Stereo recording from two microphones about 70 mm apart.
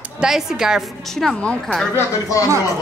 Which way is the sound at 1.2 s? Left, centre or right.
Centre.